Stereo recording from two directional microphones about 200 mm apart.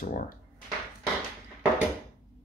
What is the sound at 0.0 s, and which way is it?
Speech, 40° left (ahead or behind).